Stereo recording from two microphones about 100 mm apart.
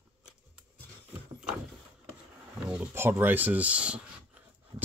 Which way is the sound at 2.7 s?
20° right (ahead or behind).